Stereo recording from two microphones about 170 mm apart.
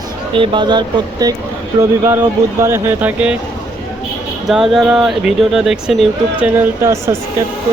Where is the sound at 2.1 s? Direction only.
15° right (ahead or behind).